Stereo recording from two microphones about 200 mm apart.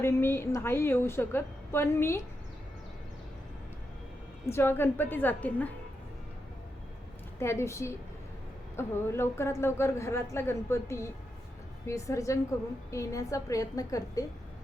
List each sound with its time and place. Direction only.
0.0 s a man's voice: 10° left (ahead or behind)
4.4 s a man's voice: 10° left (ahead or behind)
7.3 s a man's voice: 15° left (ahead or behind)